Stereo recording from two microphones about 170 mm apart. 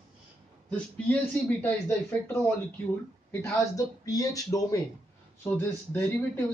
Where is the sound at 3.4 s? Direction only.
20° left (ahead or behind).